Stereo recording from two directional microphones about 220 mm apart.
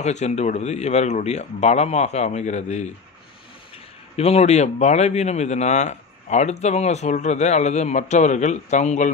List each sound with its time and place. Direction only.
0.0 s speech: 30° left (ahead or behind)
4.2 s speech: 30° left (ahead or behind)